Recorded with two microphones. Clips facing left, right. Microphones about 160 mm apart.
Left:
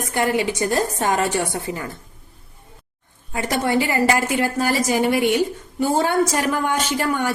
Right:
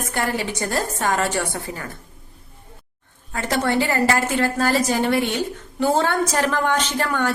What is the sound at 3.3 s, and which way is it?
A woman's voice, 15° left (ahead or behind).